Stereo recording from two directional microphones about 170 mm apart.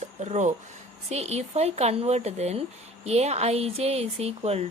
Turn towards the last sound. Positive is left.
turn(degrees=-40)  # may be behind; listen again after turning